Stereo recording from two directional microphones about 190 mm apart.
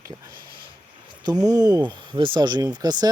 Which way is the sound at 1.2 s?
20° right (ahead or behind).